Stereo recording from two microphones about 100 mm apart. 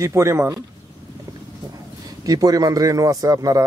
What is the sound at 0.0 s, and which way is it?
Speech, 30° right (ahead or behind).